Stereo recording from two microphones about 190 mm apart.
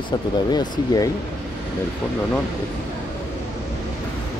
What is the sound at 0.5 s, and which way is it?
Speech, 20° left (ahead or behind).